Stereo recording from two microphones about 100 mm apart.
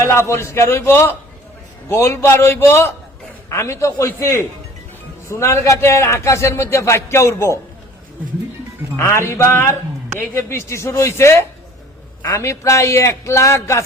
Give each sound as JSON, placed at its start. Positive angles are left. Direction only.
{"t": 0.0, "sound": "a man's voice", "side_deg": 25}
{"t": 9.0, "sound": "a man's voice", "side_deg": 25}